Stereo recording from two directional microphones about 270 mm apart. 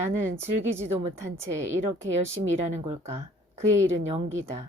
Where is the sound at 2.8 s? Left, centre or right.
Centre.